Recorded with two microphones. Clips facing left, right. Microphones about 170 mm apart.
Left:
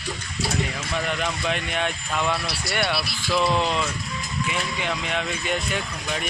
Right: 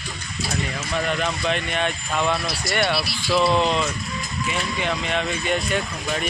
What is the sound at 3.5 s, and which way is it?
Speech, 20° right (ahead or behind).